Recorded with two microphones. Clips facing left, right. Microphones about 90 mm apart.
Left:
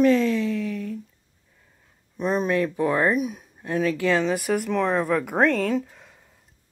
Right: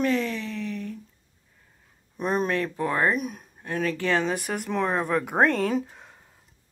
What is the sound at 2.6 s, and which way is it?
Speech, 15° left (ahead or behind).